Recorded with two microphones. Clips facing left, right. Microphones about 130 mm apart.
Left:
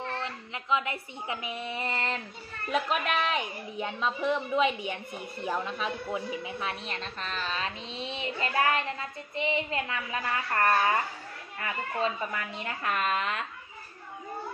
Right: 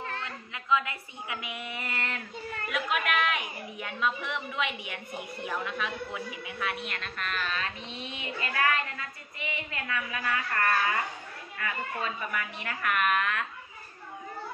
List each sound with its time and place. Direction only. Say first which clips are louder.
0.2 s a woman's voice: left 3 dB; 25° left (ahead or behind)